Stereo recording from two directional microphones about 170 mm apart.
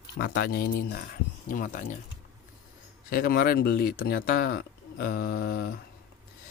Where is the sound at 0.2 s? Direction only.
65° left (ahead or behind).